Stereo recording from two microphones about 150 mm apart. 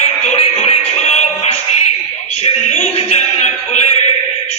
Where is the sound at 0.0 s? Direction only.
50° left (ahead or behind).